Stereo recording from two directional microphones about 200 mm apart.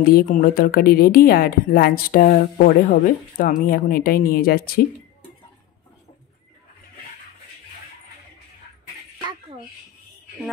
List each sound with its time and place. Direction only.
0.0 s a woman's voice: 45° left (ahead or behind)